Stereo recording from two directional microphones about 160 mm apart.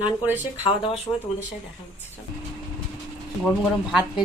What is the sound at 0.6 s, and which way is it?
Speech, 35° left (ahead or behind).